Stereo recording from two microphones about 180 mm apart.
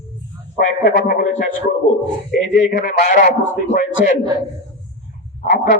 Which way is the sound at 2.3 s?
45° left (ahead or behind).